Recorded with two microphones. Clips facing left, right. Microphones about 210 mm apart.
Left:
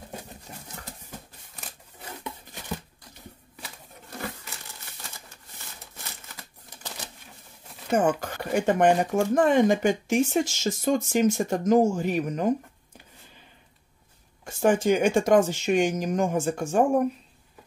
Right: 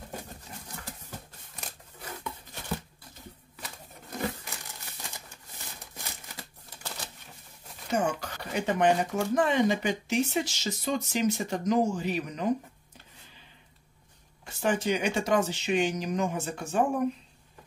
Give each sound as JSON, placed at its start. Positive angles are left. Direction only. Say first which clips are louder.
{"t": 0.5, "sound": "a sound", "louder": "left 2 dB", "side_deg": 45}
{"t": 7.9, "sound": "speech", "louder": "left 5 dB", "side_deg": 50}
{"t": 14.4, "sound": "speech", "louder": "left 6 dB", "side_deg": 50}